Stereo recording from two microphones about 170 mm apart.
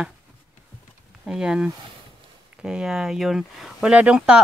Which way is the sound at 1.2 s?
5° right (ahead or behind).